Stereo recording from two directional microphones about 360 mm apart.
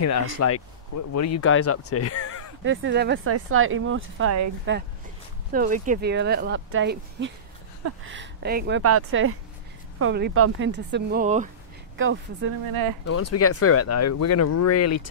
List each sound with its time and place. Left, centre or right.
0.0 s speech: left
2.6 s speech: right
13.0 s speech: left